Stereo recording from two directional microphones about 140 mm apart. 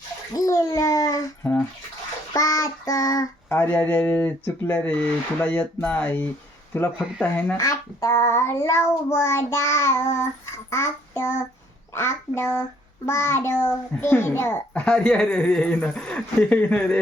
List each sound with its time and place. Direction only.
0.3 s bathtub: 25° left (ahead or behind)
2.3 s child singing: 25° left (ahead or behind)
6.7 s a child's voice: 15° left (ahead or behind)
7.5 s child singing: 25° left (ahead or behind)
11.9 s a child's voice: 15° left (ahead or behind)